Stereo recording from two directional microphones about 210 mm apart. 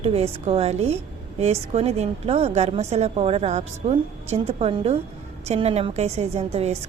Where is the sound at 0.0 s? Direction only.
30° right (ahead or behind).